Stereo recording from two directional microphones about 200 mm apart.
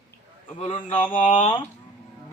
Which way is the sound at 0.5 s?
25° left (ahead or behind).